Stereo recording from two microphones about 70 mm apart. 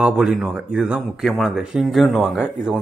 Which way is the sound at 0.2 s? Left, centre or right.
Centre.